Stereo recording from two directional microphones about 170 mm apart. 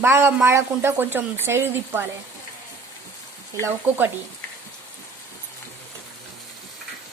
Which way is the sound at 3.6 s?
10° right (ahead or behind).